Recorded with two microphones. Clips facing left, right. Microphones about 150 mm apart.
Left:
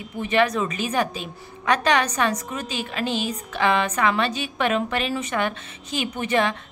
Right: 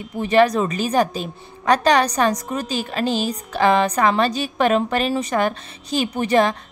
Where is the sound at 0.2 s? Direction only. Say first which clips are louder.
Right 5 dB; 35° right (ahead or behind).